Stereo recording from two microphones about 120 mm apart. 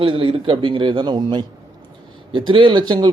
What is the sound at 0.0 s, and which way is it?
A man's voice, 50° right (ahead or behind).